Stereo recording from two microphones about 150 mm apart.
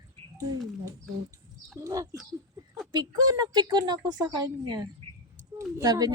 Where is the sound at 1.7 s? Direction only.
20° right (ahead or behind).